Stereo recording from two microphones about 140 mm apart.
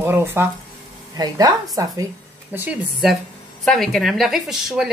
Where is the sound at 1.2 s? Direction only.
30° right (ahead or behind).